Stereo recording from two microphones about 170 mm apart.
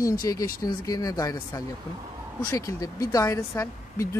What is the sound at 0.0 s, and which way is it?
Speech, 20° left (ahead or behind).